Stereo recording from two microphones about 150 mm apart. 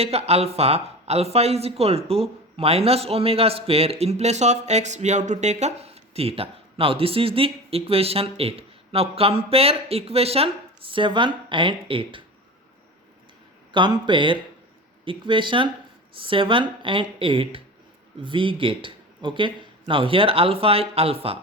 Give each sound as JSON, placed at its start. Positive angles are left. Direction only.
{"t": 0.0, "sound": "speech", "side_deg": -45}
{"t": 13.7, "sound": "speech", "side_deg": -30}